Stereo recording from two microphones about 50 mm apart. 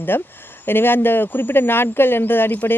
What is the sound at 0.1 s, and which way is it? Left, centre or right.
Speech, left.